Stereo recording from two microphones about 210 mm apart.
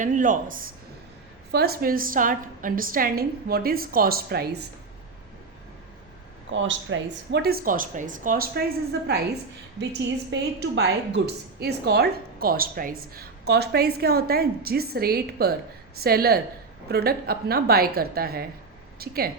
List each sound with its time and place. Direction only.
0.0 s a woman's voice: 40° right (ahead or behind)
6.5 s a woman's voice: 60° right (ahead or behind)
10.3 s a woman's voice: 55° right (ahead or behind)